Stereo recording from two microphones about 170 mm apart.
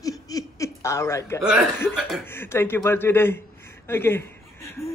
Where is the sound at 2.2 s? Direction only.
15° left (ahead or behind).